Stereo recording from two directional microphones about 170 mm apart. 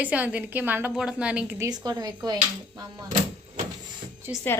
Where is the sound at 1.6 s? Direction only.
25° right (ahead or behind).